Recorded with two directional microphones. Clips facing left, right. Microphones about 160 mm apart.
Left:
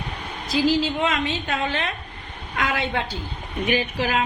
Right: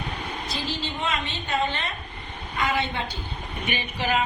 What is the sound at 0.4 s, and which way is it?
A woman's voice, 90° left.